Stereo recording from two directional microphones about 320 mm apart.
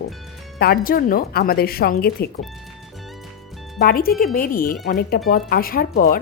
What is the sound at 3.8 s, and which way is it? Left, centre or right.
Speech, left.